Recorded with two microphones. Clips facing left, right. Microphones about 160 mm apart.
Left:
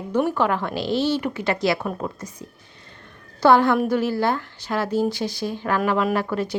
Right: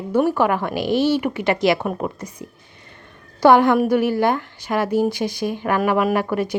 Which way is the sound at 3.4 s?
15° right (ahead or behind).